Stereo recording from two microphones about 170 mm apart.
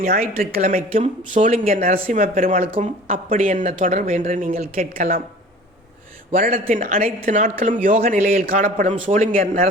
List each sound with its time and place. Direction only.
0.5 s speech: 50° right (ahead or behind)
2.6 s speech: 40° right (ahead or behind)
3.1 s speech: 50° right (ahead or behind)
6.3 s speech: 55° right (ahead or behind)